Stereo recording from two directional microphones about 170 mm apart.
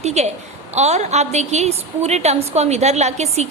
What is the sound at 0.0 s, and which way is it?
A woman's voice, 40° right (ahead or behind).